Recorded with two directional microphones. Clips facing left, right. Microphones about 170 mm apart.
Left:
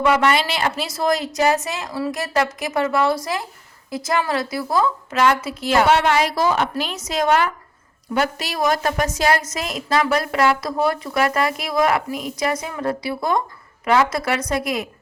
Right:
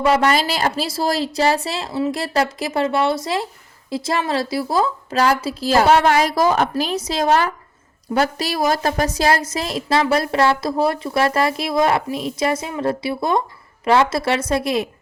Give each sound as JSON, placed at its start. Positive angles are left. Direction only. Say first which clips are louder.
{"t": 0.0, "sound": "a woman's voice", "louder": "right 1 dB", "side_deg": -35}